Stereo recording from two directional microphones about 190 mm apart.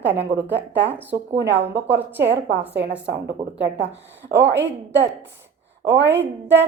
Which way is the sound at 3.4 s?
15° right (ahead or behind).